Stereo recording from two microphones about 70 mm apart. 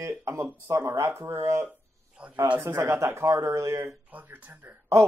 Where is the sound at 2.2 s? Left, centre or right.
Centre.